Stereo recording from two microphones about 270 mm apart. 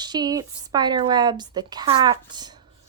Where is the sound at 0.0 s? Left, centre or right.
Centre.